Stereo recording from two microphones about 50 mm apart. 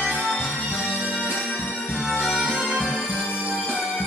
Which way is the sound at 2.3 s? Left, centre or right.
Right.